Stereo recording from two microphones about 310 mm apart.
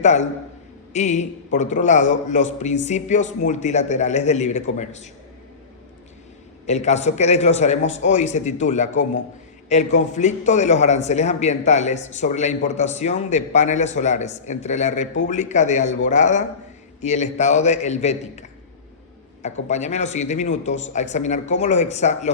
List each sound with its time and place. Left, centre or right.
0.0 s a man's voice: left
6.7 s a man's voice: left
19.6 s a man's voice: left